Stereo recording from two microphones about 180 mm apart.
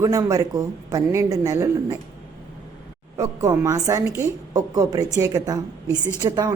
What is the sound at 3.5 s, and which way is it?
A woman's voice, 15° right (ahead or behind).